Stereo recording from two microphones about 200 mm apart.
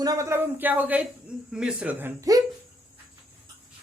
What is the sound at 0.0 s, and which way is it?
Speech, 15° right (ahead or behind).